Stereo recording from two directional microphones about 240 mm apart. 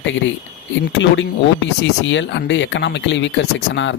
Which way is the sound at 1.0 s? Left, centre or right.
Left.